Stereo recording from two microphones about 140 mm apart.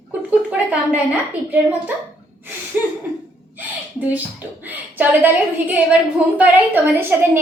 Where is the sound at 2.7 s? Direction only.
10° right (ahead or behind).